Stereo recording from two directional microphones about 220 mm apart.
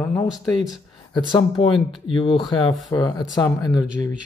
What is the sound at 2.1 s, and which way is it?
Speech, 25° left (ahead or behind).